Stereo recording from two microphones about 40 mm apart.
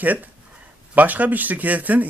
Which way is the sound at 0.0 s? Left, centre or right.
Right.